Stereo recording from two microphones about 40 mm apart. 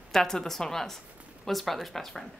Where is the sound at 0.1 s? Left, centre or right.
Centre.